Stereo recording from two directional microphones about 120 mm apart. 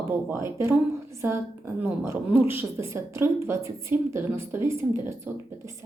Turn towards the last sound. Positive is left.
turn(degrees=-20)  # may be behind; listen again after turning